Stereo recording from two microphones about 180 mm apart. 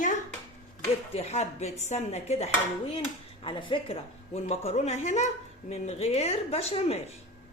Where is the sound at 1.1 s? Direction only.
35° left (ahead or behind).